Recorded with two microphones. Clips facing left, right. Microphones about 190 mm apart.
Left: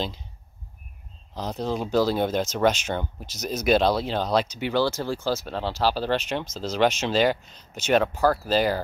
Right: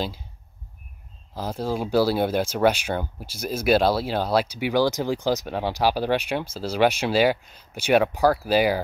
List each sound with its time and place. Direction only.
1.3 s speech: 5° right (ahead or behind)